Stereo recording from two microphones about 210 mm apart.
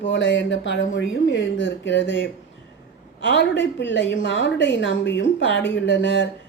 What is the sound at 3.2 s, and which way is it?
Speech, 60° left (ahead or behind).